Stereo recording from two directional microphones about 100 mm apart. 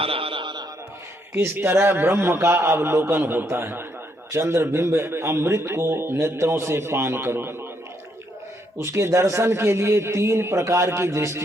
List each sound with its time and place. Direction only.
0.0 s a sound: 65° right (ahead or behind)
1.3 s a man's voice: 25° right (ahead or behind)
8.8 s a man's voice: 25° right (ahead or behind)